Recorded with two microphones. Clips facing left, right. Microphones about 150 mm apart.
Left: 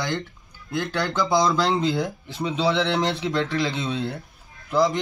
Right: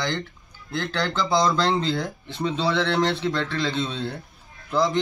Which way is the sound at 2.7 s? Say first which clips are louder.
Even; 20° left (ahead or behind).